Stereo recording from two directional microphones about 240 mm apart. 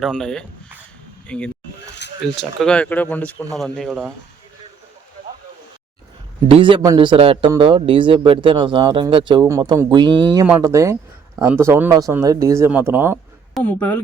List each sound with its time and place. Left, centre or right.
0.0 s speech: centre
6.5 s a man's voice: right
13.6 s speech: centre